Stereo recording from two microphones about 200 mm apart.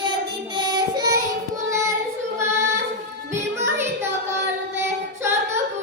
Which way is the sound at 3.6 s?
10° right (ahead or behind).